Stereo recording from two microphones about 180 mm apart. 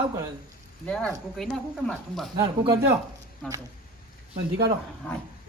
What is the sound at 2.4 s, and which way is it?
Speech, 20° right (ahead or behind).